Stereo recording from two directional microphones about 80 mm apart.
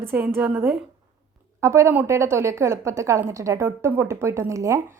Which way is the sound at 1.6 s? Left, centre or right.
Right.